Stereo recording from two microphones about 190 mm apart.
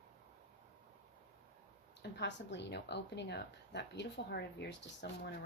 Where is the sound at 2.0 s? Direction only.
65° left (ahead or behind).